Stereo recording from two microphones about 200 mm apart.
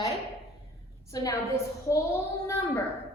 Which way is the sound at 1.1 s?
15° left (ahead or behind).